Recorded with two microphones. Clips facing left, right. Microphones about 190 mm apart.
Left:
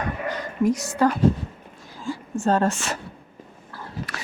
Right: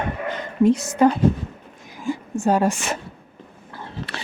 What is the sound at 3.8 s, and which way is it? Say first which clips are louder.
Biting: right 1 dB; 30° right (ahead or behind).